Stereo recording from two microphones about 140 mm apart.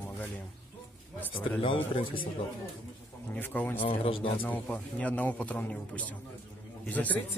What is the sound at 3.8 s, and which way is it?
Speech, 40° left (ahead or behind).